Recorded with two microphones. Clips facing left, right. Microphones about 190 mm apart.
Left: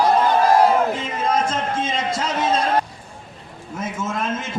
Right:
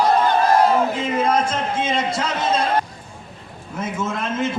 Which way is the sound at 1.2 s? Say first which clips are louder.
Right 1 dB; 40° left (ahead or behind).